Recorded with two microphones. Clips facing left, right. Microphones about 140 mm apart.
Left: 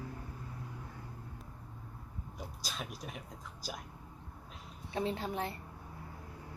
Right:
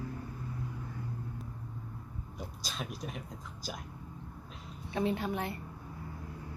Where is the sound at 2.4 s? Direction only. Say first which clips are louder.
Right 2 dB; 5° left (ahead or behind).